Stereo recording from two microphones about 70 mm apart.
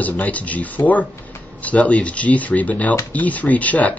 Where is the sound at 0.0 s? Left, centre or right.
Left.